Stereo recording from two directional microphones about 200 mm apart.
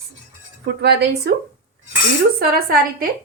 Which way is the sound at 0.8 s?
55° right (ahead or behind).